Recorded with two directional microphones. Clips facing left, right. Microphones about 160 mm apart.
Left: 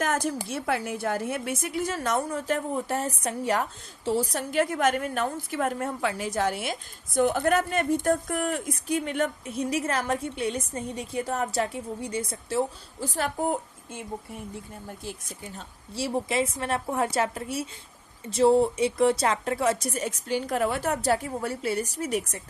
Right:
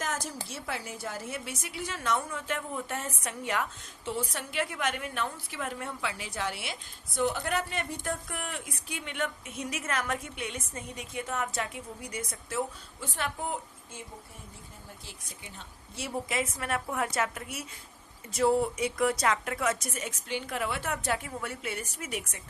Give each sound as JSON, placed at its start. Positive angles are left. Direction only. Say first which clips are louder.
{"t": 0.0, "sound": "a sound", "louder": "left 8 dB", "side_deg": 60}
{"t": 0.4, "sound": "a woman's voice", "louder": "left 9 dB", "side_deg": 55}
{"t": 15.0, "sound": "a woman's voice", "louder": "left 10 dB", "side_deg": 45}
{"t": 16.0, "sound": "speech", "louder": "left 6 dB", "side_deg": 30}